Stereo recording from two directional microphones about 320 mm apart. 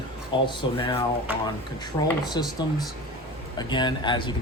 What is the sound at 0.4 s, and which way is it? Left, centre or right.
Speech, centre.